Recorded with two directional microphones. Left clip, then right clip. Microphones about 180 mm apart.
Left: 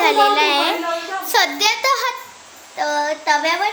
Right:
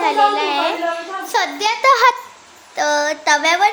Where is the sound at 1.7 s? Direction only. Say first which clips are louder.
Right 6 dB; 45° right (ahead or behind).